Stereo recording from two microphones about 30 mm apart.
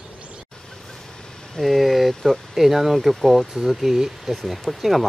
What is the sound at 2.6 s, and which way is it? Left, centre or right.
Speech, centre.